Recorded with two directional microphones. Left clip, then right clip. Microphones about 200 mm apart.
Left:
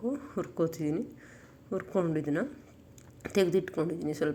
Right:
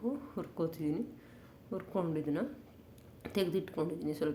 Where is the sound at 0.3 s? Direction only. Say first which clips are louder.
Left 6 dB; 15° left (ahead or behind).